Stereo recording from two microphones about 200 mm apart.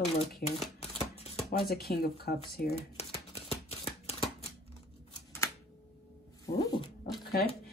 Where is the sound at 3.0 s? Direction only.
30° left (ahead or behind).